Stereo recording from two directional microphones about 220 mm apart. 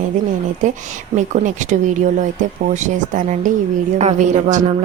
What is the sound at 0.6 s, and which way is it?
A woman's voice, 35° right (ahead or behind).